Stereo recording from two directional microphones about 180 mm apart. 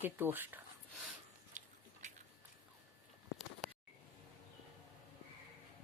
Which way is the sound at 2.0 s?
40° right (ahead or behind).